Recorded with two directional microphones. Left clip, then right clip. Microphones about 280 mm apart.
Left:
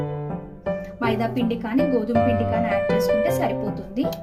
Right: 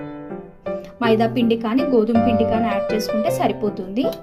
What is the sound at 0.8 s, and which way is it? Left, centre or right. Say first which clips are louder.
Speech: right 8 dB; centre.